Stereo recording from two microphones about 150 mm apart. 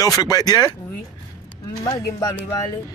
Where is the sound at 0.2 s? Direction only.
25° left (ahead or behind).